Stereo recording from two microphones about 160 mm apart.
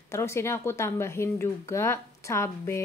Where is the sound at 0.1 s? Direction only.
15° left (ahead or behind).